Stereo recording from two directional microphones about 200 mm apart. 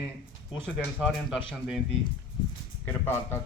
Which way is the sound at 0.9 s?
Centre (ahead or behind).